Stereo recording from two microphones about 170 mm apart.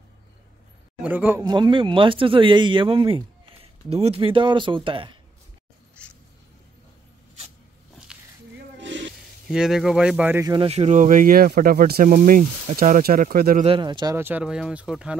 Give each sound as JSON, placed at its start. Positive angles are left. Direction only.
{"t": 1.0, "sound": "speech", "side_deg": -10}
{"t": 1.4, "sound": "speech", "side_deg": -25}
{"t": 6.0, "sound": "a sound", "side_deg": 5}
{"t": 8.1, "sound": "a sound", "side_deg": -5}
{"t": 8.7, "sound": "snake", "side_deg": -90}
{"t": 9.5, "sound": "speech", "side_deg": -5}
{"t": 10.5, "sound": "speech", "side_deg": -35}
{"t": 13.7, "sound": "speech", "side_deg": -25}